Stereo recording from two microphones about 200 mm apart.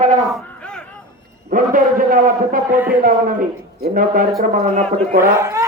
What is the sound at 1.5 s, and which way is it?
A man's voice, 40° right (ahead or behind).